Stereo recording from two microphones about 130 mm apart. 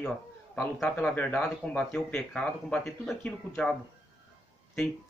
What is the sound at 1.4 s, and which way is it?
Speech, 10° left (ahead or behind).